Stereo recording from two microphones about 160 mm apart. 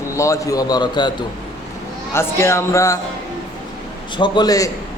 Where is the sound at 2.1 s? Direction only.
15° left (ahead or behind).